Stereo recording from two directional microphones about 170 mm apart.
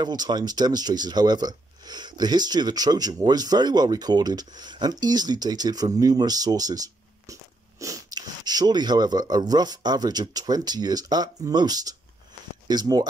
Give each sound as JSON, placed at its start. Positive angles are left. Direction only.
{"t": 0.0, "sound": "speech", "side_deg": -25}